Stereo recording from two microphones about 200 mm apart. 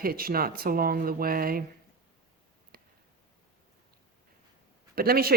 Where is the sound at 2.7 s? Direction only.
45° right (ahead or behind).